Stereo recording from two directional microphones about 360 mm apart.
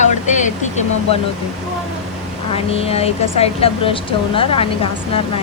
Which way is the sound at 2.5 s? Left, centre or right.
Centre.